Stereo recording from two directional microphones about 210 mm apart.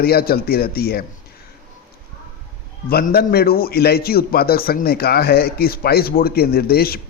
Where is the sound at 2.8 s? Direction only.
45° left (ahead or behind).